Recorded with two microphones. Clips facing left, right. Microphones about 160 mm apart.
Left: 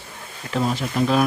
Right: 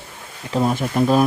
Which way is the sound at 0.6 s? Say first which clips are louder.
Right 3 dB; 50° right (ahead or behind).